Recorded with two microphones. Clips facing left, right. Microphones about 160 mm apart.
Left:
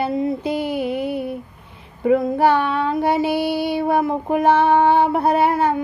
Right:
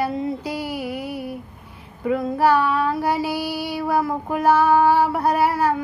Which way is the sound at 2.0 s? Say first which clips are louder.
Left 3 dB; 25° left (ahead or behind).